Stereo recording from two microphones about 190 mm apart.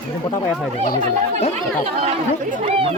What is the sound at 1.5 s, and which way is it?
Speech, 35° right (ahead or behind).